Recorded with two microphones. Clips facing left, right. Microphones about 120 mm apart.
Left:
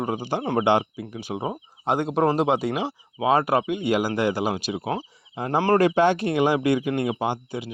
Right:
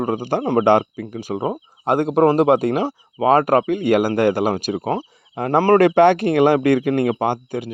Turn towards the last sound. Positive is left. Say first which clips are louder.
# right 5 dB
turn(degrees=-50)  # may be behind; listen again after turning